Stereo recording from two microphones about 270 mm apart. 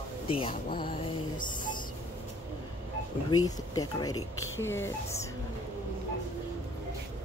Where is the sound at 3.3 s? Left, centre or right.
Centre.